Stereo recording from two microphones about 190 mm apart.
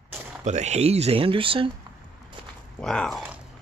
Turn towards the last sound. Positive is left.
turn(degrees=0)  # may be behind; listen again after turning